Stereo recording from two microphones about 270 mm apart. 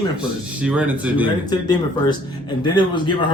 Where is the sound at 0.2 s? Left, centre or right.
Centre.